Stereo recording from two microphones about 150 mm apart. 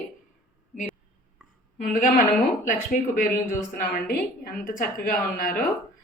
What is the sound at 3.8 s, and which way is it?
A woman's voice, 70° left (ahead or behind).